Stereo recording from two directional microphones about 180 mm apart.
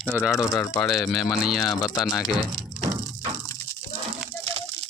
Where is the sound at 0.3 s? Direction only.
20° left (ahead or behind).